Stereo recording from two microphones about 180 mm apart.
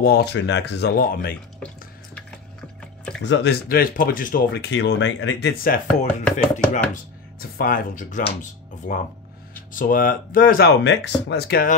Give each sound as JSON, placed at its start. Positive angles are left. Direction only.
{"t": 0.0, "sound": "speech", "side_deg": 65}
{"t": 3.2, "sound": "speech", "side_deg": 80}
{"t": 4.6, "sound": "speech", "side_deg": 75}